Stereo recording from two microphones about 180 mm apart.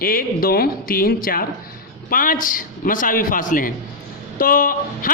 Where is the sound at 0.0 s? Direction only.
55° left (ahead or behind).